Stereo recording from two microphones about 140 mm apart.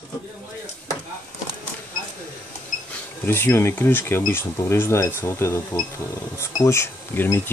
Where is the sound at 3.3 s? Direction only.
15° left (ahead or behind).